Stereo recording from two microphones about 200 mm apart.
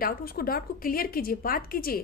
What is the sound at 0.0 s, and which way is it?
A woman's voice, 50° left (ahead or behind).